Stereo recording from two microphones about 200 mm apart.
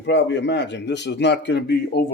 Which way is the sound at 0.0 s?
60° left (ahead or behind).